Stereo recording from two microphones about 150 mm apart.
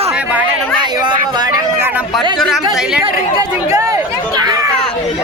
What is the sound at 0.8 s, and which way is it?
Speech, 30° right (ahead or behind).